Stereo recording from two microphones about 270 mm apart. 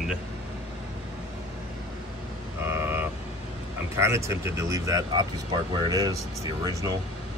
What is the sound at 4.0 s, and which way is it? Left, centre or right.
Speech, centre.